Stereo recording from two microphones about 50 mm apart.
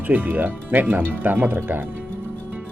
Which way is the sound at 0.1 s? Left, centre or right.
Right.